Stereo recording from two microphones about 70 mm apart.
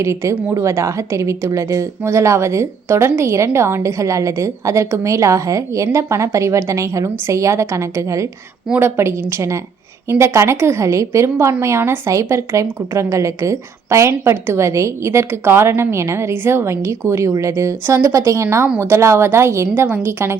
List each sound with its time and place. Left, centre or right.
0.0 s speech: right
8.8 s a woman's voice: right